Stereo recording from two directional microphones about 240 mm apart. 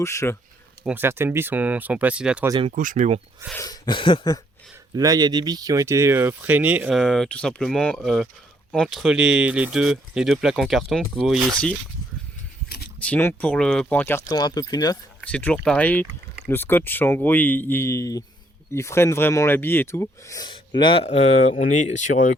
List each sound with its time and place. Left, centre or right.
0.0 s speech: centre
0.9 s speech: centre
2.5 s speech: right
2.7 s speech: right
3.6 s a sound: centre
4.9 s speech: centre
13.1 s speech: centre
15.3 s speech: centre; by 22.4 s left